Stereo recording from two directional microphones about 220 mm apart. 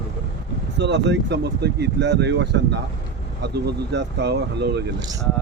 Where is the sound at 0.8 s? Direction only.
50° right (ahead or behind).